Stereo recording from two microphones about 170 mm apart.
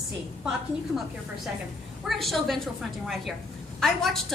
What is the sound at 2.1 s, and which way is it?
A woman's voice, centre (ahead or behind).